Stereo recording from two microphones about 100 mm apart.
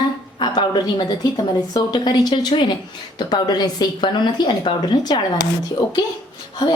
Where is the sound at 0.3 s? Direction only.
50° left (ahead or behind).